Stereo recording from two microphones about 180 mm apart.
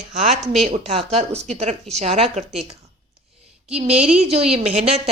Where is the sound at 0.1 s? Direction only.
40° right (ahead or behind).